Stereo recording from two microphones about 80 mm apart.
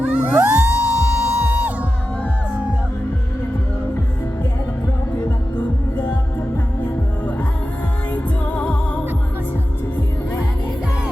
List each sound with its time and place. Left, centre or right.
0.0 s music: centre
0.3 s music: right
0.7 s music: centre
8.1 s music: left